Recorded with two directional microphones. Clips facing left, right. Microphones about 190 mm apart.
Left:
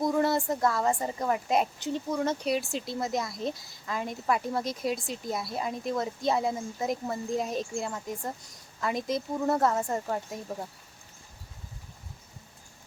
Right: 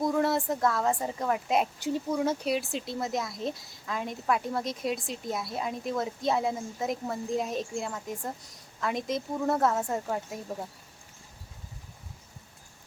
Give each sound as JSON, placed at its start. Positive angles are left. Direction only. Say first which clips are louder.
{"t": 0.0, "sound": "a woman's voice", "louder": "left 1 dB", "side_deg": 0}